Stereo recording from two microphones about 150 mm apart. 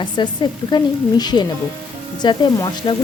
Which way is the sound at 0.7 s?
25° left (ahead or behind).